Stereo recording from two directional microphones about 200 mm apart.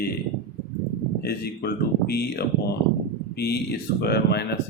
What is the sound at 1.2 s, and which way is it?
Speech, 50° left (ahead or behind).